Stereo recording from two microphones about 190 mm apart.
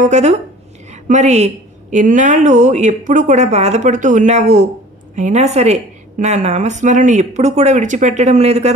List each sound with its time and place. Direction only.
0.0 s a woman's voice: 40° right (ahead or behind)